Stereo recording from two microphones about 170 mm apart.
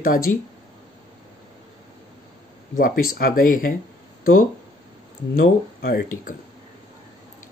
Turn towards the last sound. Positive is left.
turn(degrees=60)  # may be behind; listen again after turning